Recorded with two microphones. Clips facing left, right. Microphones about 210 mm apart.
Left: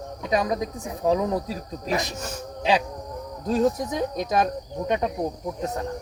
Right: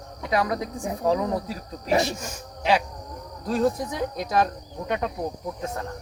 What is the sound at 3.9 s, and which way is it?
Speech, 20° left (ahead or behind).